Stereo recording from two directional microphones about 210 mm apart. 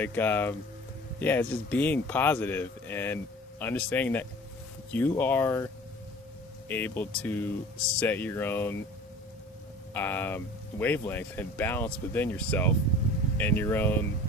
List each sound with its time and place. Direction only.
0.0 s speech: 10° left (ahead or behind)
9.9 s speech: 10° left (ahead or behind)